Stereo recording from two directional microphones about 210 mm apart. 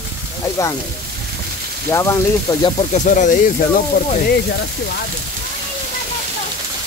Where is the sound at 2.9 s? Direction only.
35° left (ahead or behind).